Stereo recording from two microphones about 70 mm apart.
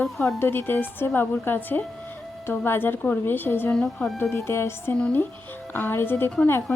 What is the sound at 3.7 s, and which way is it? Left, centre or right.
Speech, centre.